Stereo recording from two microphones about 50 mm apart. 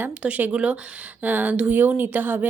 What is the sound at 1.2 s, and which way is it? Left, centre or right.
A woman's voice, right.